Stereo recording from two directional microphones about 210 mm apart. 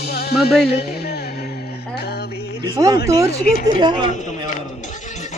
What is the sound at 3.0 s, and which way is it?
Speech, 15° right (ahead or behind).